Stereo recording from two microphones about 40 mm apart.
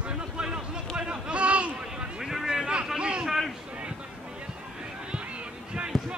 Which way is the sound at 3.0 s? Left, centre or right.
Right.